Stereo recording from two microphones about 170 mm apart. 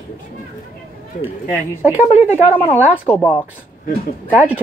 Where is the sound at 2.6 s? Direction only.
10° left (ahead or behind).